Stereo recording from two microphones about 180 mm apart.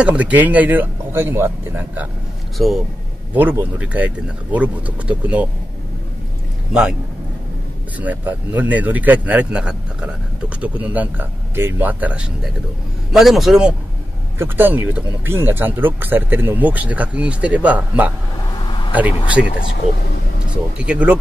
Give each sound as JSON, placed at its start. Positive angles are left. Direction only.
{"t": 0.0, "sound": "speech", "side_deg": -5}
{"t": 2.5, "sound": "a man's voice", "side_deg": 0}
{"t": 6.7, "sound": "a man's voice", "side_deg": -5}
{"t": 8.0, "sound": "a man's voice", "side_deg": -10}
{"t": 18.5, "sound": "a sound", "side_deg": 25}
{"t": 19.4, "sound": "speech", "side_deg": -5}
{"t": 20.7, "sound": "speech", "side_deg": -5}